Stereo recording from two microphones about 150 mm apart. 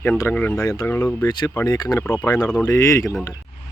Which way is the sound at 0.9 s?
15° left (ahead or behind).